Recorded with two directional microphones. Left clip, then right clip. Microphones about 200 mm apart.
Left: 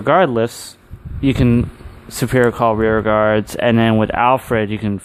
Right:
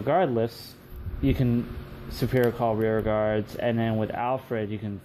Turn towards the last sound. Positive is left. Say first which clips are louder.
# left 12 dB
turn(degrees=45)  # may be behind; listen again after turning